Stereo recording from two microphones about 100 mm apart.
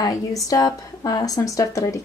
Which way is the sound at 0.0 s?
35° left (ahead or behind).